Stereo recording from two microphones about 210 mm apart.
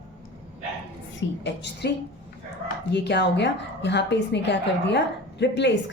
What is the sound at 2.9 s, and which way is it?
Speech, 55° left (ahead or behind).